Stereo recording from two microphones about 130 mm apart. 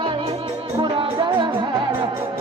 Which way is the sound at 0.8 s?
40° right (ahead or behind).